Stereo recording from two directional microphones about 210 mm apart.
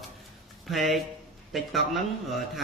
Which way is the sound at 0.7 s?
Centre (ahead or behind).